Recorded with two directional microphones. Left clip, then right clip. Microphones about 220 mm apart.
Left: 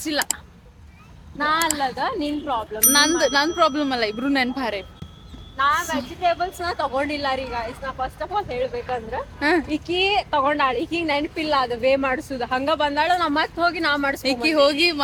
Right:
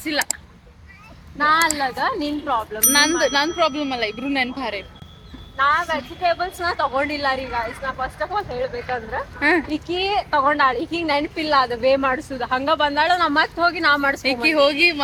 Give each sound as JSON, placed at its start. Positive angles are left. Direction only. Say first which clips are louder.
{"t": 0.0, "sound": "a woman's voice", "louder": "right 1 dB", "side_deg": 5}
{"t": 1.4, "sound": "a woman's voice", "louder": "right 4 dB", "side_deg": 0}
{"t": 5.5, "sound": "speech", "louder": "right 2 dB", "side_deg": -25}
{"t": 6.4, "sound": "a woman's voice", "louder": "right 2 dB", "side_deg": -5}
{"t": 6.7, "sound": "speech", "louder": "right 1 dB", "side_deg": 10}
{"t": 11.0, "sound": "a woman's voice", "louder": "right 2 dB", "side_deg": -5}